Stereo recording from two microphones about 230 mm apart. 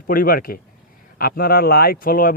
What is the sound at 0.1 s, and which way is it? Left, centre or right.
A man's voice, left.